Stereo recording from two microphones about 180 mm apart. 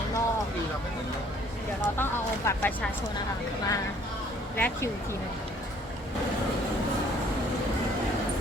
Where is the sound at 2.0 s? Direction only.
15° left (ahead or behind).